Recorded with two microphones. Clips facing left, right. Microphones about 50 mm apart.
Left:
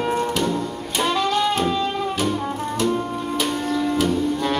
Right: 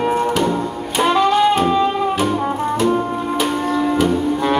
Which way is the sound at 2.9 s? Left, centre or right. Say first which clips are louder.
Right 5 dB; right.